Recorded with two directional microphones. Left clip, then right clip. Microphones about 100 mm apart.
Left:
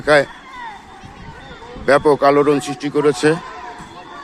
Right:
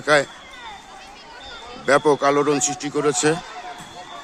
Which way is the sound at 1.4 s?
Centre (ahead or behind).